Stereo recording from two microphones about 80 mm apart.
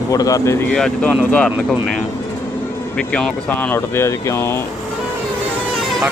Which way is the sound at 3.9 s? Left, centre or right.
Left.